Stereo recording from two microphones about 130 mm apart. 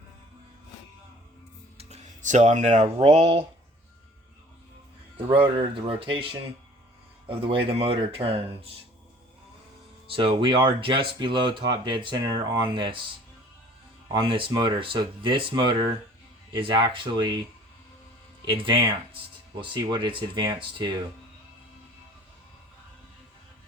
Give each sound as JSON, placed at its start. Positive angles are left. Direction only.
{"t": 1.8, "sound": "music", "side_deg": -65}
{"t": 2.8, "sound": "speech", "side_deg": -50}
{"t": 5.1, "sound": "speech", "side_deg": -40}
{"t": 10.1, "sound": "speech", "side_deg": -40}
{"t": 14.1, "sound": "speech", "side_deg": -40}
{"t": 18.4, "sound": "speech", "side_deg": -40}